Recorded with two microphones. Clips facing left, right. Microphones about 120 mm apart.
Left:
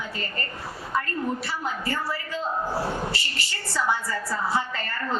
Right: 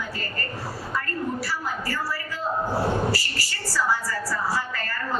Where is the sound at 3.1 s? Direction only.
25° left (ahead or behind).